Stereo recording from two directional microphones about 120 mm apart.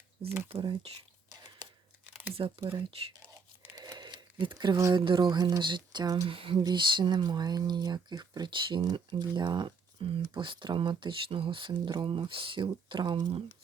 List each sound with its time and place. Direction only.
0.4 s speech: 45° right (ahead or behind)
1.3 s a sound: 40° right (ahead or behind)
2.6 s speech: 45° right (ahead or behind)
3.8 s a sound: 35° right (ahead or behind)
4.9 s speech: 40° right (ahead or behind)
6.2 s speech: 45° right (ahead or behind)